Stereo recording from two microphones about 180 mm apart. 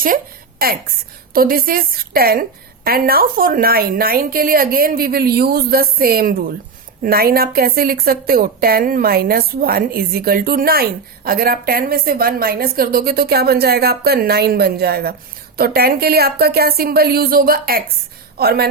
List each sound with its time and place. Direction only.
0.6 s a woman's voice: 55° right (ahead or behind)